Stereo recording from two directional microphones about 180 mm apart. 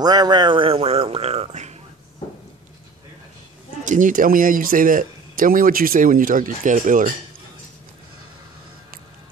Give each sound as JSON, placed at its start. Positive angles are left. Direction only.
{"t": 0.0, "sound": "speech", "side_deg": -20}
{"t": 3.8, "sound": "speech", "side_deg": -45}